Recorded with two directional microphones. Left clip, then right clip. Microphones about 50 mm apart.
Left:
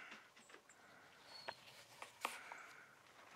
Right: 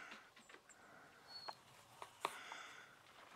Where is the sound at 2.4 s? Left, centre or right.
Right.